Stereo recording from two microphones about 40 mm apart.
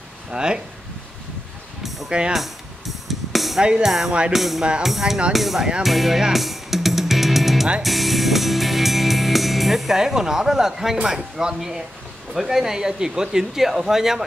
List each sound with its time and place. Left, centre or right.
0.3 s speech: right
1.8 s music: centre
2.0 s speech: right
2.3 s music: centre
3.8 s speech: centre
6.3 s music: centre
11.1 s speech: centre